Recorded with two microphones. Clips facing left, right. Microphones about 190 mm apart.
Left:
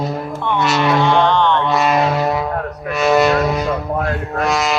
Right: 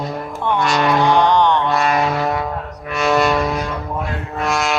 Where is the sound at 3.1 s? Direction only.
5° left (ahead or behind).